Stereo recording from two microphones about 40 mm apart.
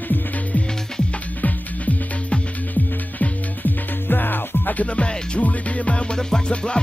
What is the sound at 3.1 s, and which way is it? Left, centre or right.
Music, left.